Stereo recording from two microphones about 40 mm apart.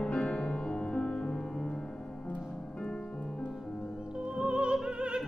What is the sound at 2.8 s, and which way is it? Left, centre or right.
Music, left.